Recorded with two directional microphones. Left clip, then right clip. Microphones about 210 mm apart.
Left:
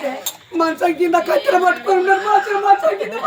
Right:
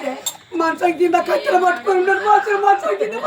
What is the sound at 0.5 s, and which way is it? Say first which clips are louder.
Speech: even; 15° left (ahead or behind).